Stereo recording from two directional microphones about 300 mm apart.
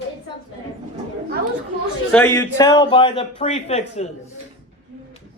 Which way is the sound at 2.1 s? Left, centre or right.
Centre.